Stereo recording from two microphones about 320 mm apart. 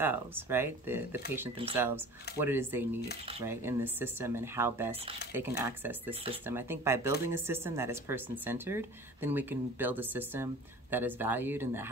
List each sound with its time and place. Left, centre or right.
0.0 s speech: centre
1.6 s speech: centre
2.3 s speech: centre